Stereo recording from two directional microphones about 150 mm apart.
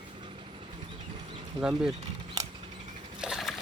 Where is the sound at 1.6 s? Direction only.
5° right (ahead or behind).